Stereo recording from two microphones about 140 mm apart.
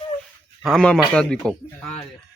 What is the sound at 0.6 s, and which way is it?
A man's voice, centre (ahead or behind).